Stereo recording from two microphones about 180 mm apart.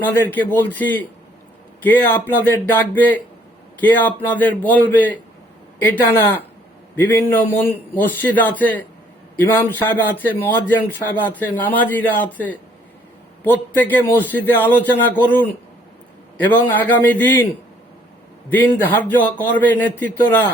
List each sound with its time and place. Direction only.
0.0 s a man's voice: 10° left (ahead or behind)
18.5 s a man's voice: 10° left (ahead or behind)